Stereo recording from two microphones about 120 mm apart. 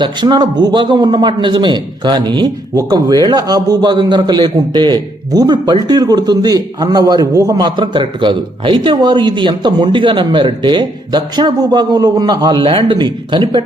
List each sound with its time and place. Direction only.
0.0 s a man's voice: 40° right (ahead or behind)